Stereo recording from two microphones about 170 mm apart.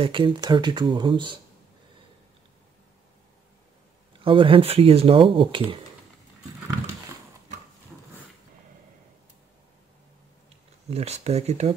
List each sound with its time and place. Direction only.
0.0 s speech: 30° right (ahead or behind)
4.1 s speech: 30° right (ahead or behind)
10.9 s speech: 40° right (ahead or behind)